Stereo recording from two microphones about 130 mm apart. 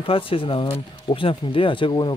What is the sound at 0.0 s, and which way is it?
Speech, 45° left (ahead or behind).